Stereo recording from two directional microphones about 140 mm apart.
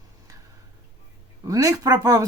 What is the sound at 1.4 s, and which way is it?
Speech, 25° right (ahead or behind).